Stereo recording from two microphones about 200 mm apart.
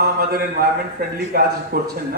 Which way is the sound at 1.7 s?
50° right (ahead or behind).